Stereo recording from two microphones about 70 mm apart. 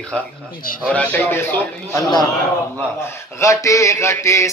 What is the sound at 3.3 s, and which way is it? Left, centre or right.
Mantra, left.